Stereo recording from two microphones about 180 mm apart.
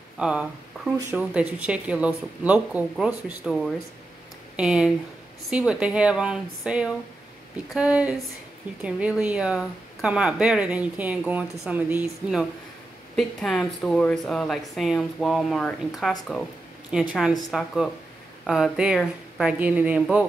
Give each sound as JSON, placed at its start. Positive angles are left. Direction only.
{"t": 0.2, "sound": "speech", "side_deg": -5}